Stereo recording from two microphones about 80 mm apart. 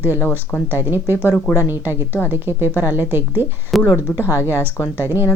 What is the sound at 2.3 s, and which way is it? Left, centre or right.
A woman's voice, right.